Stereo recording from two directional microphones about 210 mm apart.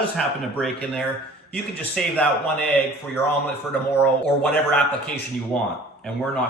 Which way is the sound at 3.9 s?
10° left (ahead or behind).